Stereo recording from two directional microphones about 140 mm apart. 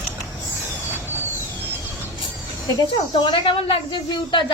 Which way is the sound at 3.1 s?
35° left (ahead or behind).